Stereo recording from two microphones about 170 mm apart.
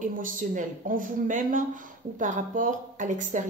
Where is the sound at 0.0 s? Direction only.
50° right (ahead or behind).